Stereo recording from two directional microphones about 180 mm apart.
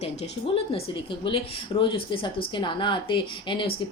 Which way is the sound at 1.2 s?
30° left (ahead or behind).